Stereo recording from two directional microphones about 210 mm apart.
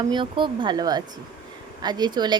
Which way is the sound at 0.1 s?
20° right (ahead or behind).